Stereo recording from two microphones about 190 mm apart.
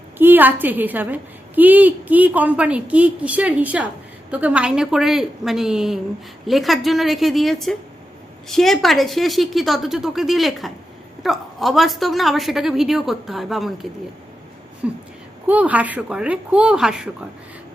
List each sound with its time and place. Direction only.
0.2 s a woman's voice: 10° right (ahead or behind)
14.8 s a woman's voice: 5° right (ahead or behind)